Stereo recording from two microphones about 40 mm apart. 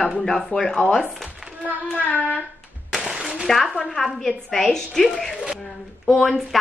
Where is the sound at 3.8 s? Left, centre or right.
Centre.